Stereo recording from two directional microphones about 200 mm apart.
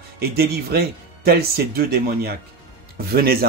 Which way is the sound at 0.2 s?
50° right (ahead or behind).